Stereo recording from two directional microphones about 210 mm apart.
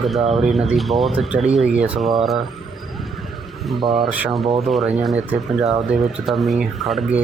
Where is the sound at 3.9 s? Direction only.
5° right (ahead or behind).